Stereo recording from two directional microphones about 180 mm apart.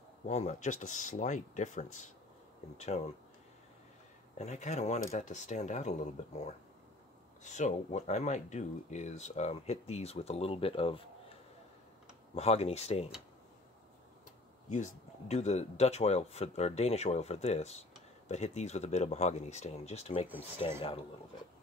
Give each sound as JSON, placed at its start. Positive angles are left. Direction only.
{"t": 0.3, "sound": "speech", "side_deg": 40}
{"t": 4.4, "sound": "speech", "side_deg": 40}
{"t": 12.4, "sound": "speech", "side_deg": 35}
{"t": 14.7, "sound": "speech", "side_deg": 40}